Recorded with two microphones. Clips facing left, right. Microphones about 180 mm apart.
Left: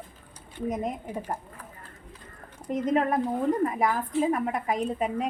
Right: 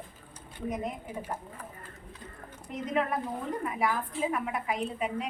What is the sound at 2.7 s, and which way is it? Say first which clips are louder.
A woman's voice: left 6 dB; 40° left (ahead or behind).